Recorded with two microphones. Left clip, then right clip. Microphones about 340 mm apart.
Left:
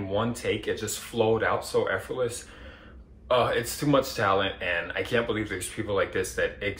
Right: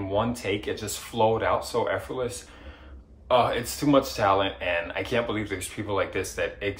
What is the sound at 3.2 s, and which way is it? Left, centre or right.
Speech, right.